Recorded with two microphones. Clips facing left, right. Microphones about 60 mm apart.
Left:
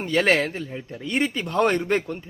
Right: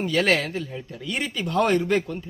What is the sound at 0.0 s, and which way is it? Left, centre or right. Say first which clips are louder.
Speech: left 1 dB; left.